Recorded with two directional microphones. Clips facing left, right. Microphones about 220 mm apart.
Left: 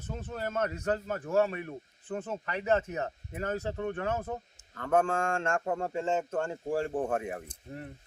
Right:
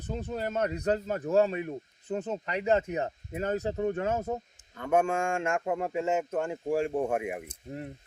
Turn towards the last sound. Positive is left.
turn(degrees=-15)  # may be behind; listen again after turning